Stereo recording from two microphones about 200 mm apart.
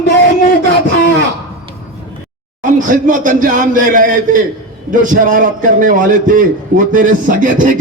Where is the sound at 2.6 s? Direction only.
40° right (ahead or behind).